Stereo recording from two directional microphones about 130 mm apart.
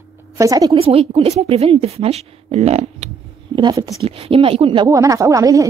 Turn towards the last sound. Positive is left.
turn(degrees=-25)  # may be behind; listen again after turning